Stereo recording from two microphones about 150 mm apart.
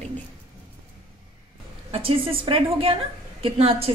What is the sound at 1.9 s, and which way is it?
A woman's voice, 40° right (ahead or behind).